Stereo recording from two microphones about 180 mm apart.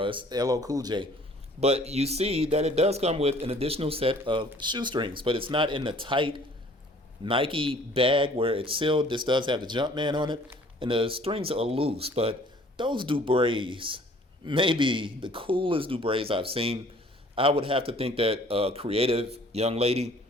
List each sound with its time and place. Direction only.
0.0 s speech: 25° right (ahead or behind)
1.6 s speech: 35° right (ahead or behind)